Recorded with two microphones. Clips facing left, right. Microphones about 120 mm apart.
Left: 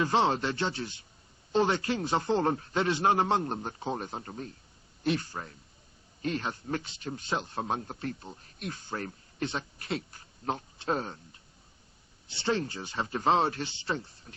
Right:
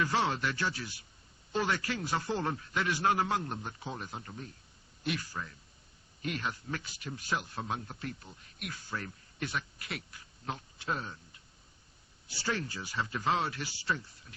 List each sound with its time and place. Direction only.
0.0 s speech: 25° left (ahead or behind)
2.4 s a man's voice: 40° left (ahead or behind)
2.7 s a man's voice: 25° left (ahead or behind); by 4.5 s 40° left (ahead or behind)
5.0 s a man's voice: 30° left (ahead or behind)
7.6 s a man's voice: 40° left (ahead or behind)
12.3 s speech: 25° left (ahead or behind)